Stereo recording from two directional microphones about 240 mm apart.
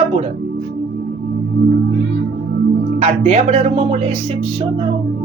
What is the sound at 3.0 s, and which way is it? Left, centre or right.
Speech, right.